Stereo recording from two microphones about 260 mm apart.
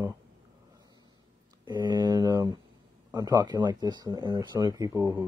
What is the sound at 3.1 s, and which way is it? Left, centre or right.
Speech, centre.